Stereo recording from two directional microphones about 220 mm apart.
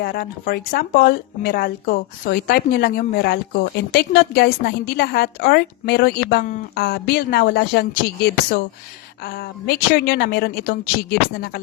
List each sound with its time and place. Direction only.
0.0 s speech: 45° left (ahead or behind)